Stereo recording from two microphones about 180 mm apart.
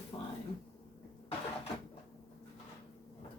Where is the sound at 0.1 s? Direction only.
20° left (ahead or behind).